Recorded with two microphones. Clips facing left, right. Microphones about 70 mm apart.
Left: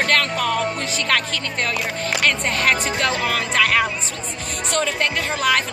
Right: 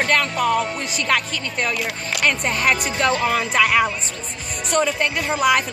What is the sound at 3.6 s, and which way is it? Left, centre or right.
Speech, centre.